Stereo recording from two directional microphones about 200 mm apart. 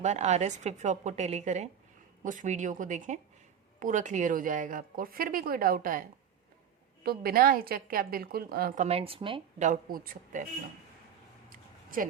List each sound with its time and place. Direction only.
0.0 s a woman's voice: 35° right (ahead or behind)
9.6 s a woman's voice: 45° right (ahead or behind)
11.4 s a sound: 45° right (ahead or behind)